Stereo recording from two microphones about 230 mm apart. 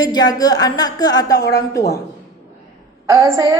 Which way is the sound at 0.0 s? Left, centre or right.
Centre.